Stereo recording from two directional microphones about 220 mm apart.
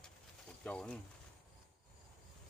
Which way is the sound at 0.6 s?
5° left (ahead or behind).